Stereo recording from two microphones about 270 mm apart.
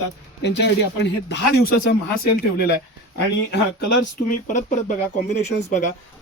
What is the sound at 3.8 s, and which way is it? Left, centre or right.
Speech, left.